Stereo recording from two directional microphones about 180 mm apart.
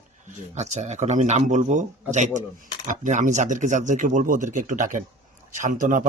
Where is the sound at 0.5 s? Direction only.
40° right (ahead or behind).